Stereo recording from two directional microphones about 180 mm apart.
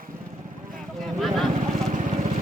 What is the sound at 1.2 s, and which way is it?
Vehicle, centre (ahead or behind).